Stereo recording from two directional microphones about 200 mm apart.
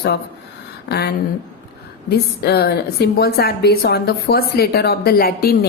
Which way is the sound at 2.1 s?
55° left (ahead or behind).